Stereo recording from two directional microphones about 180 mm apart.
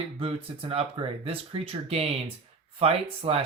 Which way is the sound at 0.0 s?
35° right (ahead or behind).